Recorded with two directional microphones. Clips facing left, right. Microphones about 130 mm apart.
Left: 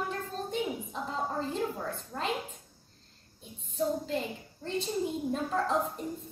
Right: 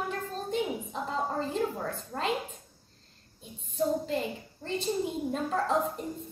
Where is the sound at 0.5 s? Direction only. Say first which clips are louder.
Right 3 dB; centre (ahead or behind).